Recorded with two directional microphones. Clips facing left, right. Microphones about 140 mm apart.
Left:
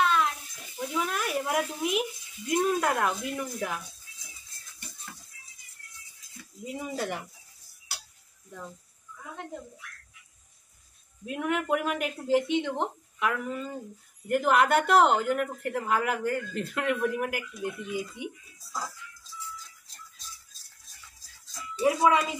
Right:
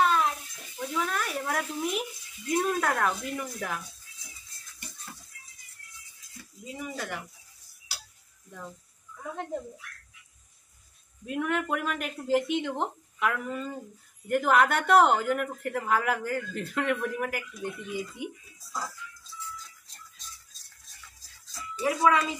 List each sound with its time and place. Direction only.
0.0 s a sound: 35° right (ahead or behind)
0.7 s speech: 10° left (ahead or behind)
6.8 s speech: 25° left (ahead or behind)
11.2 s speech: 5° left (ahead or behind)
21.7 s speech: 20° left (ahead or behind)